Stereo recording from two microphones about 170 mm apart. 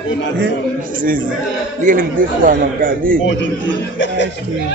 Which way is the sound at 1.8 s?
50° right (ahead or behind).